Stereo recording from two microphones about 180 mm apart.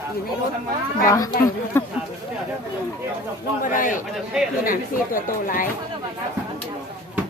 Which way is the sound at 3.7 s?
50° left (ahead or behind).